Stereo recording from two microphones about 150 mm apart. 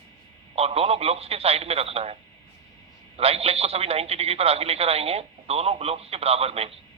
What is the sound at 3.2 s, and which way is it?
Speech, 40° right (ahead or behind).